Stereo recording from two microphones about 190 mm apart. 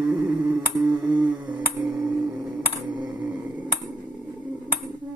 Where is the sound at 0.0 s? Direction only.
5° right (ahead or behind).